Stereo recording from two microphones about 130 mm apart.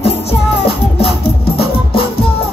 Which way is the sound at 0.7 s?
45° left (ahead or behind).